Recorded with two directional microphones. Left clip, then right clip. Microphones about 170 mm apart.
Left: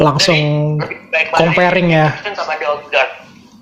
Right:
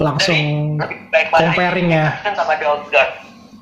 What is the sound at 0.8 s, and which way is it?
Speech, 10° right (ahead or behind).